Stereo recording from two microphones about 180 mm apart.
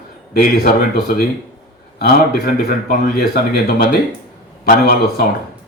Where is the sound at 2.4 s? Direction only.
55° left (ahead or behind).